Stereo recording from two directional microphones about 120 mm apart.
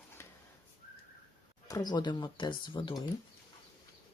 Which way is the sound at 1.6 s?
30° left (ahead or behind).